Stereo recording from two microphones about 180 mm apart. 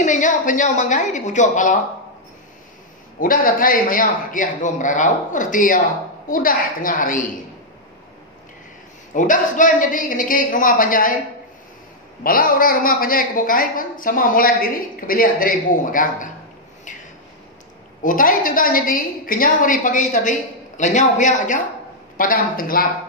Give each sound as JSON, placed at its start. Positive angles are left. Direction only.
{"t": 0.0, "sound": "a woman's voice", "side_deg": 45}
{"t": 3.2, "sound": "a woman's voice", "side_deg": 50}
{"t": 9.1, "sound": "a woman's voice", "side_deg": 45}
{"t": 12.2, "sound": "a woman's voice", "side_deg": 50}
{"t": 18.0, "sound": "a woman's voice", "side_deg": 50}